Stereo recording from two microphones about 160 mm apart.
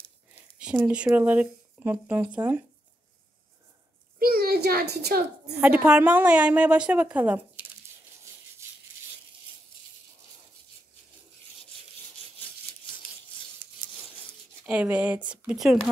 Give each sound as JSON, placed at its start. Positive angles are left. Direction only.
{"t": 0.3, "sound": "speech", "side_deg": -5}
{"t": 4.2, "sound": "a sound", "side_deg": -70}
{"t": 5.5, "sound": "a woman's voice", "side_deg": -5}
{"t": 14.7, "sound": "a woman's voice", "side_deg": -10}